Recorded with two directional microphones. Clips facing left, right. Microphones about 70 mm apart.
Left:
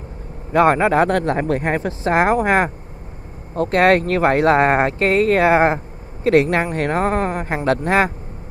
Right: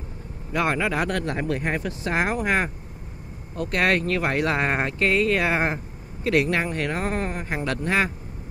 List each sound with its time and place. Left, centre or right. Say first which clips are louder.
0.5 s speech: left 10 dB; left